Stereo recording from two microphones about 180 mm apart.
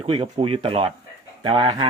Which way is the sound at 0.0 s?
30° right (ahead or behind).